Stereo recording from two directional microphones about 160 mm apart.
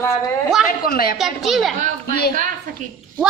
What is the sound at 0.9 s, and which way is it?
Speech, 70° left (ahead or behind).